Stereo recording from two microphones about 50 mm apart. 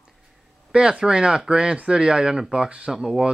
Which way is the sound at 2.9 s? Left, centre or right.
Centre.